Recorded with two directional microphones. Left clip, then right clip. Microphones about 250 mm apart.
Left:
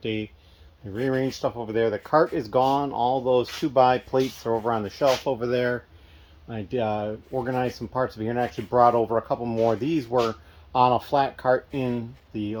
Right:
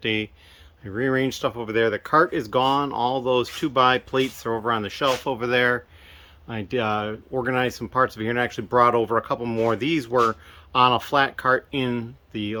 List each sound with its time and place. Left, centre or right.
0.0 s speech: centre; by 2.6 s right
2.6 s speech: centre
3.9 s speech: right
4.5 s speech: centre
4.9 s speech: right
5.3 s speech: centre